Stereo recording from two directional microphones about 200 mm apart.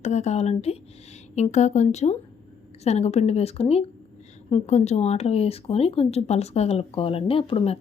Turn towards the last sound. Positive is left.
turn(degrees=25)  # may be behind; listen again after turning